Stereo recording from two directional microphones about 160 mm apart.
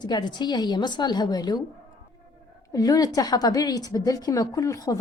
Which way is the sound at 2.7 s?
25° left (ahead or behind).